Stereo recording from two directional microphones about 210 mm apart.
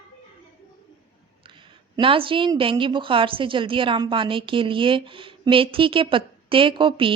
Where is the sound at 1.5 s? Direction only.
25° right (ahead or behind).